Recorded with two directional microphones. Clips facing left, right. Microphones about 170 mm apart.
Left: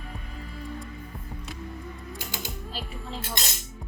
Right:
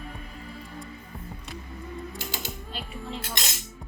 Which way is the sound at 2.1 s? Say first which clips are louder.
Right 1 dB; 15° left (ahead or behind).